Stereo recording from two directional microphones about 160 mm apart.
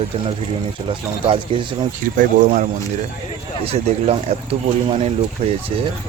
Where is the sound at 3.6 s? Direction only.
40° right (ahead or behind).